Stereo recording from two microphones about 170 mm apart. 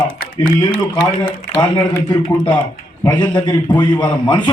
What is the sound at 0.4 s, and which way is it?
Speech, 55° left (ahead or behind).